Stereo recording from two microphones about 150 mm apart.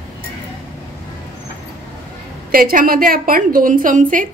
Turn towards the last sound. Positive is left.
turn(degrees=-60)  # may be behind; listen again after turning